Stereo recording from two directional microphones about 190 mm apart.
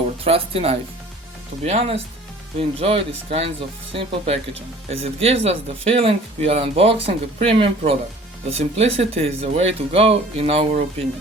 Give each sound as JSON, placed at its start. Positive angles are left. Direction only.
{"t": 0.3, "sound": "speech", "side_deg": -30}